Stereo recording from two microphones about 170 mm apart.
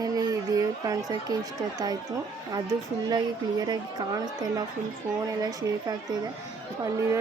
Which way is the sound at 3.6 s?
25° right (ahead or behind).